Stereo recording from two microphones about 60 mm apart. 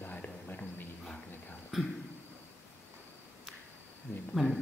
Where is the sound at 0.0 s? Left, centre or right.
Left.